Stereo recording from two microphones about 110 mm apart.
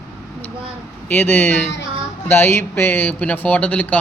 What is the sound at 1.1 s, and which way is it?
A woman's voice, 20° left (ahead or behind).